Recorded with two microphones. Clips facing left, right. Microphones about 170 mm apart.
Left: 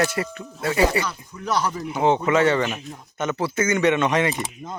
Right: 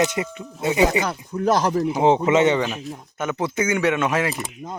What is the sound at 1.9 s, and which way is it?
Speech, 30° right (ahead or behind).